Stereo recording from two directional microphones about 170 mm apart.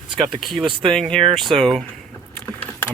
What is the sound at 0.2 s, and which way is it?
Speech, centre (ahead or behind).